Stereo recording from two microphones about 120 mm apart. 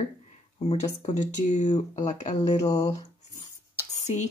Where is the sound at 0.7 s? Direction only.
70° left (ahead or behind).